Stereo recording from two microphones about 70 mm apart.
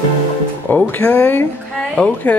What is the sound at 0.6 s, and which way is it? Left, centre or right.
Speech, left.